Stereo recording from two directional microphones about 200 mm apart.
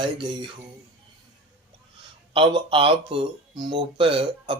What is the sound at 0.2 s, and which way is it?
Speech, 20° right (ahead or behind).